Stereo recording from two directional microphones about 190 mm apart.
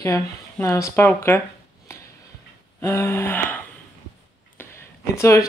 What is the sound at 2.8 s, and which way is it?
Speech, 10° left (ahead or behind).